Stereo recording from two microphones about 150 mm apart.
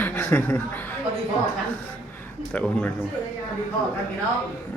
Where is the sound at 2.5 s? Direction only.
10° left (ahead or behind).